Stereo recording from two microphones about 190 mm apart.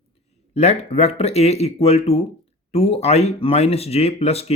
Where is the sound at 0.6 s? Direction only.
35° left (ahead or behind).